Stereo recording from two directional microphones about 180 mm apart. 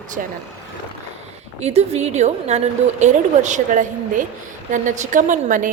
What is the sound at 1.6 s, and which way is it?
A woman's voice, 35° right (ahead or behind).